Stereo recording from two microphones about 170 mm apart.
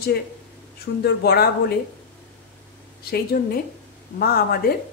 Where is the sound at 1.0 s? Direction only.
70° left (ahead or behind).